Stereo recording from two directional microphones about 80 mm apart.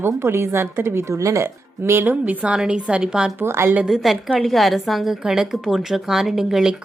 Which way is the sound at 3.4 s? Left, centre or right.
Right.